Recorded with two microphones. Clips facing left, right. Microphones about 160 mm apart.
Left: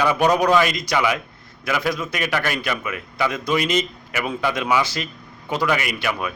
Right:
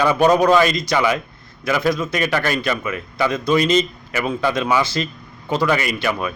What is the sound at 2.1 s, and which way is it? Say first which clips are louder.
A man's voice: right 4 dB; 10° left (ahead or behind).